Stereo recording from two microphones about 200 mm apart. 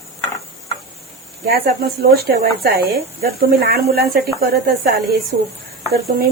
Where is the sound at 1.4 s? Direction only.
50° right (ahead or behind).